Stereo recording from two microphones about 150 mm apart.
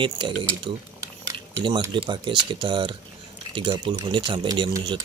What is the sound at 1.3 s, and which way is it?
Cutlery, 35° right (ahead or behind).